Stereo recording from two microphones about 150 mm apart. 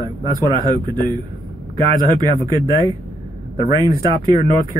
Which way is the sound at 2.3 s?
25° right (ahead or behind).